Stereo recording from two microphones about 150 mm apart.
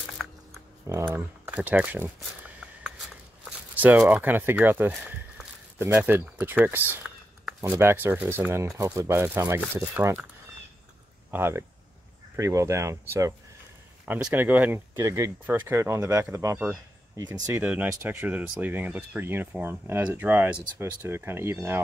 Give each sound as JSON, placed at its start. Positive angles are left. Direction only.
{"t": 0.2, "sound": "a sound", "side_deg": 0}
{"t": 0.8, "sound": "speech", "side_deg": -20}
{"t": 2.1, "sound": "a sound", "side_deg": -5}
{"t": 3.4, "sound": "walk", "side_deg": -10}
{"t": 4.2, "sound": "speech", "side_deg": -15}
{"t": 11.3, "sound": "speech", "side_deg": -15}